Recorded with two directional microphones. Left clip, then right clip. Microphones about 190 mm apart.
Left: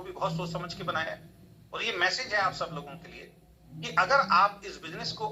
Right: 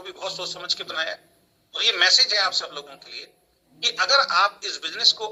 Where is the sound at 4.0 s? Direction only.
30° right (ahead or behind).